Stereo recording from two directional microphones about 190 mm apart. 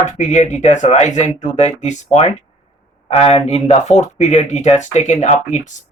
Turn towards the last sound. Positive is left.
turn(degrees=40)  # may be behind; listen again after turning